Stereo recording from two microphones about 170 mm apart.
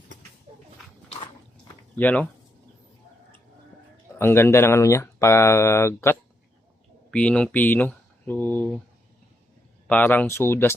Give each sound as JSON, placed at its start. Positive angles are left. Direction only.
{"t": 2.0, "sound": "speech", "side_deg": 10}
{"t": 4.2, "sound": "speech", "side_deg": 15}
{"t": 9.8, "sound": "speech", "side_deg": 10}